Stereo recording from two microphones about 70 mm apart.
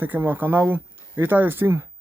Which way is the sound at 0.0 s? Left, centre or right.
Right.